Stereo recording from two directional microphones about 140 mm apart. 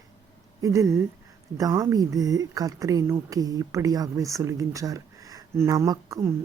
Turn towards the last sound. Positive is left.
turn(degrees=-25)  # may be behind; listen again after turning